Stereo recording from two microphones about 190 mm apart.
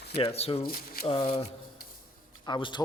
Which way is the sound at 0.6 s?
50° left (ahead or behind).